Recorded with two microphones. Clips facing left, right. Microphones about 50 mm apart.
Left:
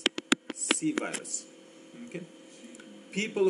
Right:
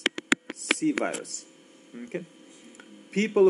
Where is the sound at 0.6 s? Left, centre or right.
Right.